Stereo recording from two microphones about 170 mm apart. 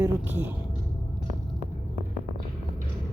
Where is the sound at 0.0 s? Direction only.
10° right (ahead or behind).